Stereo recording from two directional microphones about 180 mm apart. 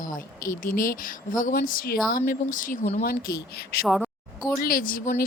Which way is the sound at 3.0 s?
55° left (ahead or behind).